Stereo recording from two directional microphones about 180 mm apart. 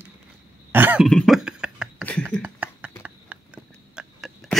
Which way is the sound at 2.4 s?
10° right (ahead or behind).